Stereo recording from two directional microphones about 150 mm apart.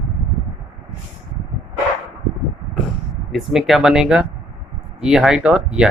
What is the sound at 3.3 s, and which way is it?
Speech, centre (ahead or behind).